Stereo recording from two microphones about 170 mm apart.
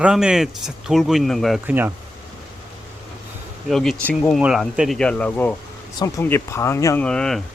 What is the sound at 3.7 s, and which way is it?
Speech, centre (ahead or behind).